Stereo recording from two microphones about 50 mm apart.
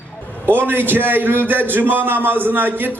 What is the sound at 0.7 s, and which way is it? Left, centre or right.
A man's voice, right.